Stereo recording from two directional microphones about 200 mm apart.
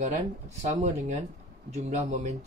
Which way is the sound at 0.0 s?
35° right (ahead or behind).